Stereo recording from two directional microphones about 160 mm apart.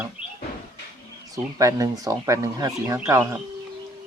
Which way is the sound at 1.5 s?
20° right (ahead or behind).